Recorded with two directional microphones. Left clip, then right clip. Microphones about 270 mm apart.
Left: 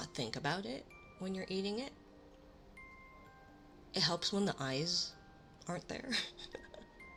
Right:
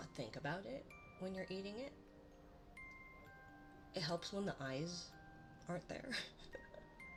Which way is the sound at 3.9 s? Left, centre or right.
Centre.